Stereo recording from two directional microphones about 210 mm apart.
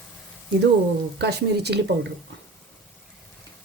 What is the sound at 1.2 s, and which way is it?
Speech, 50° right (ahead or behind).